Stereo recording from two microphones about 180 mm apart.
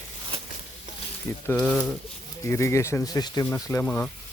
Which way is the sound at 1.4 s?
5° left (ahead or behind).